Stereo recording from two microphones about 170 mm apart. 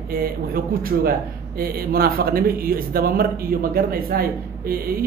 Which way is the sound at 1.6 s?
60° right (ahead or behind).